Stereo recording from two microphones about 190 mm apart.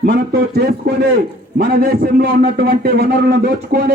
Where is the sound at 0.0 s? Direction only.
55° right (ahead or behind).